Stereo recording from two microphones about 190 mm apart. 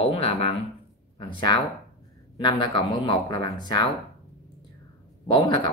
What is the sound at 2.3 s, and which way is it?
Speech, 25° left (ahead or behind).